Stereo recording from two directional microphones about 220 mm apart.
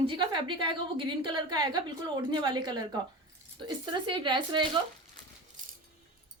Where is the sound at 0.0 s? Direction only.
20° right (ahead or behind).